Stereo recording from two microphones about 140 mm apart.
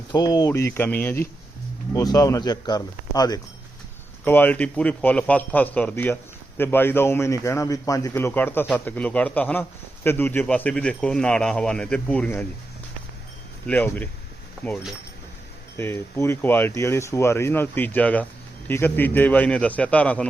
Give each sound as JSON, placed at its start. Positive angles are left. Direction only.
{"t": 0.1, "sound": "speech", "side_deg": 25}
{"t": 1.9, "sound": "speech", "side_deg": 25}
{"t": 4.3, "sound": "a man's voice", "side_deg": 15}
{"t": 13.7, "sound": "a man's voice", "side_deg": 10}
{"t": 15.8, "sound": "a man's voice", "side_deg": 20}